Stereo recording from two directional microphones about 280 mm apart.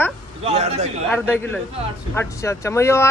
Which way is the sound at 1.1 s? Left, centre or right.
Centre.